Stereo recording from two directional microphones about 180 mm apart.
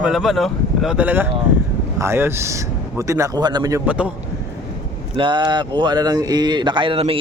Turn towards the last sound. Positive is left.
turn(degrees=-30)  # may be behind; listen again after turning